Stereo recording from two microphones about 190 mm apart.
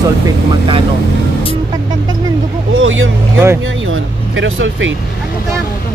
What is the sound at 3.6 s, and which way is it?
Speech, 90° right.